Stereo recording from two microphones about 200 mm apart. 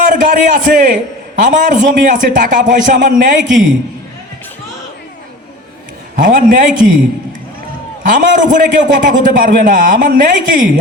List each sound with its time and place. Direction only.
0.0 s a man's voice: 40° right (ahead or behind)
6.1 s a man's voice: 40° right (ahead or behind)
8.1 s a man's voice: 40° right (ahead or behind)